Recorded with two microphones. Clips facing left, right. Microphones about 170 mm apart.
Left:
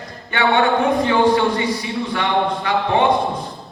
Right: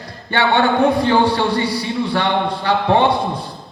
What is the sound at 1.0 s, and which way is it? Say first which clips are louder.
Speech: even; 35° right (ahead or behind).